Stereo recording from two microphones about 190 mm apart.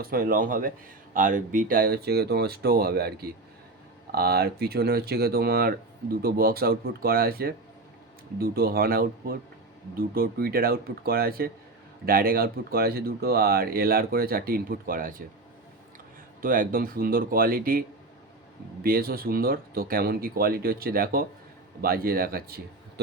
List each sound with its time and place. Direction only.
0.0 s speech: 50° right (ahead or behind)
16.4 s speech: 50° right (ahead or behind)